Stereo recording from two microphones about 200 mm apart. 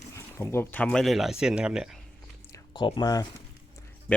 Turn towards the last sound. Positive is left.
turn(degrees=5)  # may be behind; listen again after turning